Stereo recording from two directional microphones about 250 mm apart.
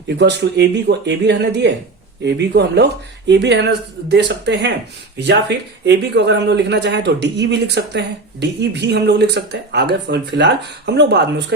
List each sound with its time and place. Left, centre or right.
0.2 s speech: right